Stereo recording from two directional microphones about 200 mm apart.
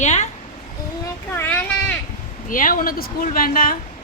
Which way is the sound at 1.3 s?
10° left (ahead or behind).